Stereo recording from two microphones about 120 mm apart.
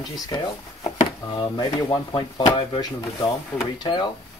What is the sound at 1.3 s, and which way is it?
Speech, 35° left (ahead or behind).